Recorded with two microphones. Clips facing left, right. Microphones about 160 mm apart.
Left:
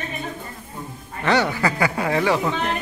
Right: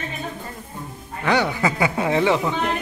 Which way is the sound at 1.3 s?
10° right (ahead or behind).